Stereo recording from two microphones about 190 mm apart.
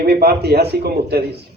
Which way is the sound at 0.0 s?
55° right (ahead or behind).